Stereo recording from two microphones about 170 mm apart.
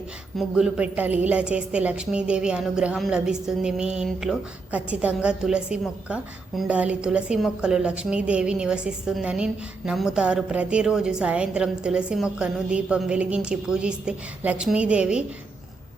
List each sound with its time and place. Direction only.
0.3 s a woman's voice: 5° right (ahead or behind)